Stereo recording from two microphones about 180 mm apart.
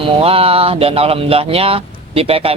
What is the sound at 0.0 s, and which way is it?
Speech, 30° right (ahead or behind).